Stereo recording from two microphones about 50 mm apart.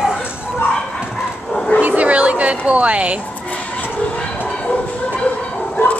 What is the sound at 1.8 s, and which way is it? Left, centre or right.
Speech, right.